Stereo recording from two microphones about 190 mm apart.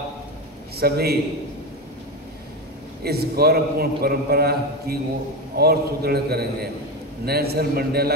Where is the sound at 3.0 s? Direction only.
55° right (ahead or behind).